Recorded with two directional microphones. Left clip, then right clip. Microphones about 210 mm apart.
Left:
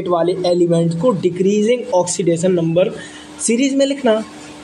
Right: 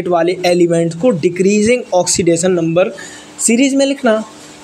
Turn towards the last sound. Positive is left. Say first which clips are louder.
# right 2 dB
turn(degrees=-20)  # may be behind; listen again after turning